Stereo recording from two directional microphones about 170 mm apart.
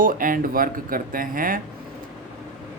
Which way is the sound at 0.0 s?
55° right (ahead or behind).